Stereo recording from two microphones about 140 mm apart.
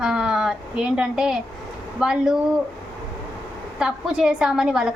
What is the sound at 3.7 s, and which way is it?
A woman's voice, 5° right (ahead or behind).